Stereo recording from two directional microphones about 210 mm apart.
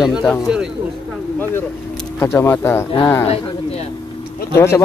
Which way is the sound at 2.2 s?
10° left (ahead or behind).